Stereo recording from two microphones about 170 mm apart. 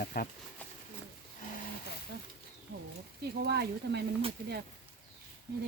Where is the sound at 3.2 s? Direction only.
75° right (ahead or behind).